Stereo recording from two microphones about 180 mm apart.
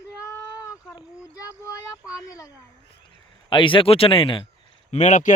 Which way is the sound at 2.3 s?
20° left (ahead or behind).